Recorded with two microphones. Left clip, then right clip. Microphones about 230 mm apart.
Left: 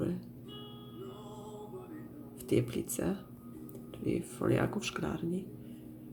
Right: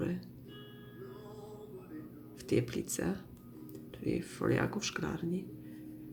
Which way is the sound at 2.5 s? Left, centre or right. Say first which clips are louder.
Left 1 dB; centre.